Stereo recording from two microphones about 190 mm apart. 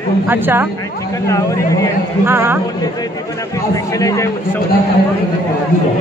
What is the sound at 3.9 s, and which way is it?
Speech, 15° left (ahead or behind).